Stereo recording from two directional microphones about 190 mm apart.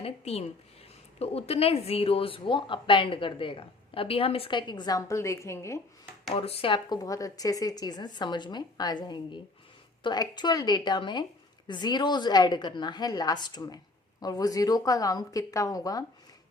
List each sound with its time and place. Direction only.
0.0 s speech: 30° left (ahead or behind); by 5.8 s 15° left (ahead or behind)
6.3 s speech: 30° left (ahead or behind)